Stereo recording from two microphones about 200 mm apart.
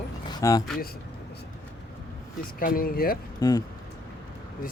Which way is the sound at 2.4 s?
45° left (ahead or behind).